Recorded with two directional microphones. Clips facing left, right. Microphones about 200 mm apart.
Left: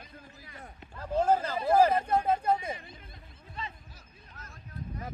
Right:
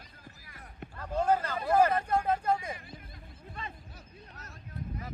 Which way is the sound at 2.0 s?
25° left (ahead or behind).